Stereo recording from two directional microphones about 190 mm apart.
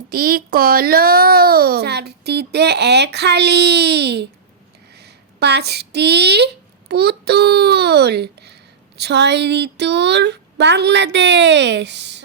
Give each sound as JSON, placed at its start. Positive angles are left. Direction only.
{"t": 0.1, "sound": "a child's voice", "side_deg": -50}